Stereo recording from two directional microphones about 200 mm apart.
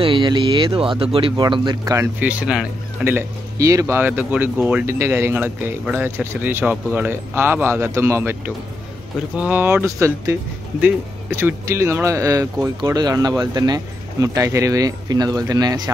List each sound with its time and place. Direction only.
0.0 s speech: 25° right (ahead or behind)
9.4 s speech: 10° right (ahead or behind)